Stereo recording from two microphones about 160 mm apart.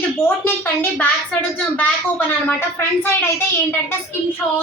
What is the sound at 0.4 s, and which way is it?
A child's voice, 15° left (ahead or behind).